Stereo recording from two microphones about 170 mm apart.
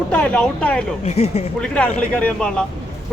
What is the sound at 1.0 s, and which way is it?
Speech, 40° left (ahead or behind).